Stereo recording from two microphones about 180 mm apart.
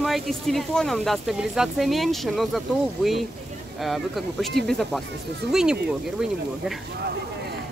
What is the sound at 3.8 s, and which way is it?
Speech, centre (ahead or behind).